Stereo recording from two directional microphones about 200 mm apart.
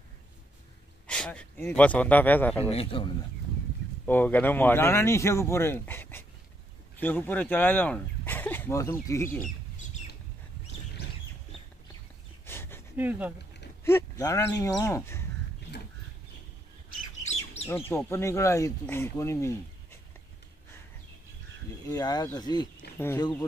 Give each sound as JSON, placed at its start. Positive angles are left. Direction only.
{"t": 1.0, "sound": "speech", "side_deg": 5}
{"t": 2.7, "sound": "speech", "side_deg": 25}
{"t": 4.0, "sound": "speech", "side_deg": 10}
{"t": 12.4, "sound": "a sound", "side_deg": 10}
{"t": 12.9, "sound": "speech", "side_deg": -10}
{"t": 13.8, "sound": "speech", "side_deg": 15}
{"t": 16.9, "sound": "bird", "side_deg": 35}
{"t": 17.6, "sound": "speech", "side_deg": 10}
{"t": 21.8, "sound": "speech", "side_deg": 20}